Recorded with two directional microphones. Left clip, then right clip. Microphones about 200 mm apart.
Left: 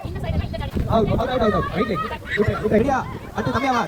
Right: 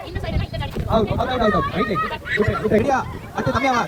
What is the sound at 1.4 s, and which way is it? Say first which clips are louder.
Speech: right 3 dB; 55° right (ahead or behind).